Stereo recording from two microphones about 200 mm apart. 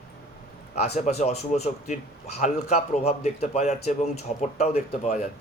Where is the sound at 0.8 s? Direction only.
35° left (ahead or behind).